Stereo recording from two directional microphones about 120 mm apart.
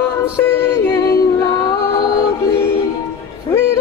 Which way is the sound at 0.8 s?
25° left (ahead or behind).